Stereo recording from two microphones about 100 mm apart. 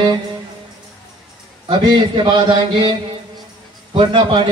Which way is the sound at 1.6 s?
50° right (ahead or behind).